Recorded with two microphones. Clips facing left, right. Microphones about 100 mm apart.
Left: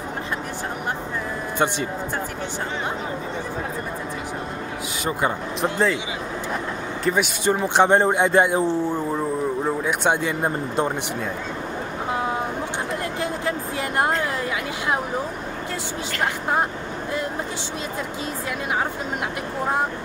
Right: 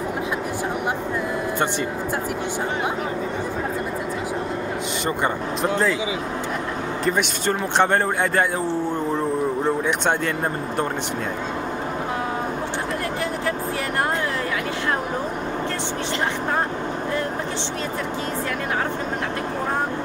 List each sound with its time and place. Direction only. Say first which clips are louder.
5.0 s speech: left 1 dB; 5° left (ahead or behind)
7.1 s speech: left 2 dB; 10° left (ahead or behind)
9.7 s speech: left 1 dB; 10° left (ahead or behind)